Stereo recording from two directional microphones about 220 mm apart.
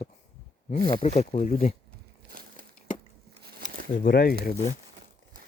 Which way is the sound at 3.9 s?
40° left (ahead or behind).